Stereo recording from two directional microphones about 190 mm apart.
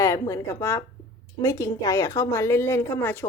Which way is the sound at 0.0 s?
15° left (ahead or behind).